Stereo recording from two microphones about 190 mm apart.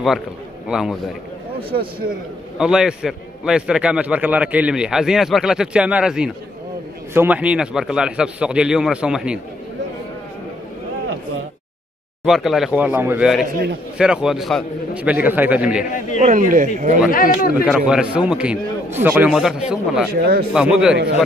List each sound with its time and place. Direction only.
0.7 s a man's voice: 5° right (ahead or behind)
1.7 s a man's voice: 25° right (ahead or behind)
2.6 s a man's voice: 5° right (ahead or behind)
12.3 s a man's voice: centre (ahead or behind)
16.2 s speech: 40° right (ahead or behind)
17.1 s a man's voice: 45° left (ahead or behind)
17.6 s a man's voice: 5° right (ahead or behind)
20.1 s speech: 55° right (ahead or behind)
20.5 s a man's voice: 5° right (ahead or behind)